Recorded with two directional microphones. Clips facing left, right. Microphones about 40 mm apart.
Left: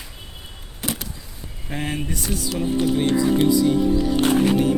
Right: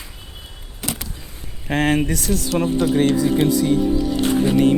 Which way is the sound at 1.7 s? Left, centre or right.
Right.